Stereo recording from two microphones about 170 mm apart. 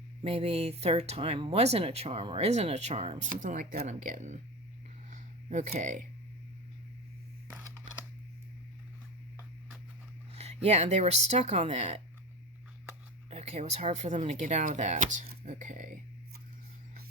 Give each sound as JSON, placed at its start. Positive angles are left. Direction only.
{"t": 0.2, "sound": "speech", "side_deg": -35}
{"t": 5.1, "sound": "a sound", "side_deg": -45}
{"t": 5.8, "sound": "speech", "side_deg": -45}
{"t": 10.3, "sound": "speech", "side_deg": -40}
{"t": 13.3, "sound": "speech", "side_deg": -40}